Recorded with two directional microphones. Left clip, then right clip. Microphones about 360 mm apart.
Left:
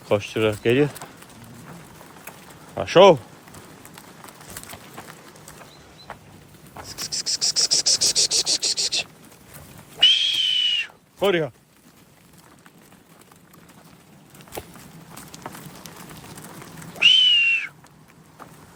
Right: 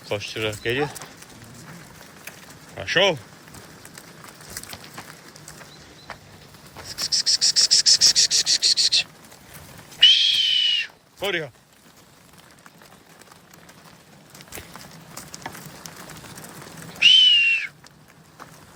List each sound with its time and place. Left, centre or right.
0.0 s speech: centre
2.7 s speech: centre
6.8 s cricket: centre
10.0 s owl: centre
17.0 s a sound: centre